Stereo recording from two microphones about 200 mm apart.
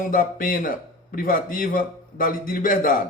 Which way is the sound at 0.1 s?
45° left (ahead or behind).